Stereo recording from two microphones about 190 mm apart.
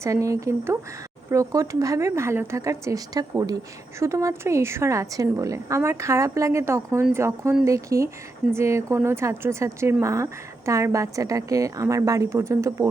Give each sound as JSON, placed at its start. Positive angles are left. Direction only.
{"t": 0.0, "sound": "a woman's voice", "side_deg": -15}